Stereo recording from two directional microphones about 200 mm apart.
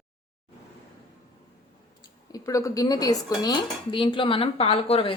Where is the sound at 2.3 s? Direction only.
15° left (ahead or behind).